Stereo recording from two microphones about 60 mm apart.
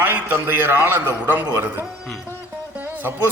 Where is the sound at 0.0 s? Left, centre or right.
Right.